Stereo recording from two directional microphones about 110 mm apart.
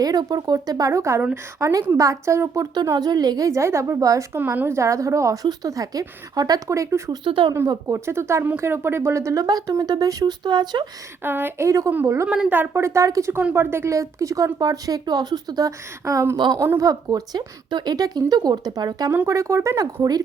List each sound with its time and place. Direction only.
0.0 s a woman's voice: 35° right (ahead or behind)
2.8 s speech: 35° right (ahead or behind)
4.4 s a woman's voice: 20° right (ahead or behind)
7.3 s speech: 50° right (ahead or behind)
7.7 s speech: 30° right (ahead or behind)
11.2 s a woman's voice: 20° right (ahead or behind)
12.3 s a woman's voice: 10° right (ahead or behind); by 19.1 s 35° right (ahead or behind)
19.1 s a woman's voice: 25° right (ahead or behind)